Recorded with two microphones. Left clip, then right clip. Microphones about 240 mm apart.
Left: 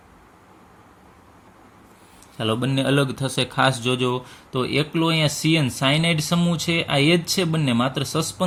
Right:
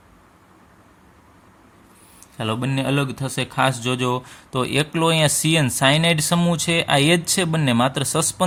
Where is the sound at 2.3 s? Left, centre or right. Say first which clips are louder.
Left 1 dB; right.